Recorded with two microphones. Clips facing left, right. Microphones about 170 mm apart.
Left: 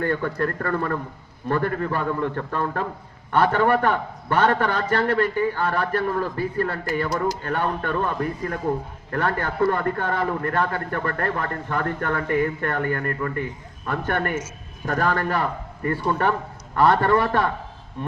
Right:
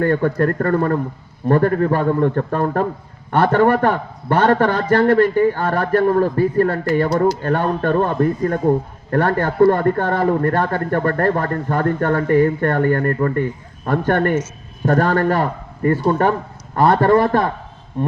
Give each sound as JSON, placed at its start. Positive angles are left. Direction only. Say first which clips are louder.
{"t": 0.0, "sound": "a man's voice", "louder": "right 7 dB", "side_deg": -50}